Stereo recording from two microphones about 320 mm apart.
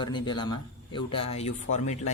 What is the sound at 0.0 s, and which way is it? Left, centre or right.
Speech, centre.